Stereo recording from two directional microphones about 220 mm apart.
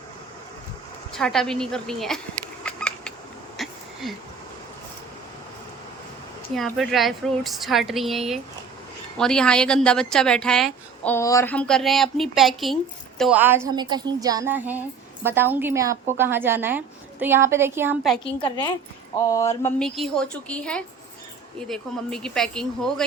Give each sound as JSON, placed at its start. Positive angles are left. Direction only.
{"t": 1.1, "sound": "a woman's voice", "side_deg": 0}
{"t": 2.6, "sound": "cat", "side_deg": 5}
{"t": 3.6, "sound": "a sound", "side_deg": 0}
{"t": 6.5, "sound": "a woman's voice", "side_deg": 0}
{"t": 18.3, "sound": "a woman's voice", "side_deg": 20}
{"t": 19.2, "sound": "a sound", "side_deg": 15}
{"t": 20.0, "sound": "a woman's voice", "side_deg": 5}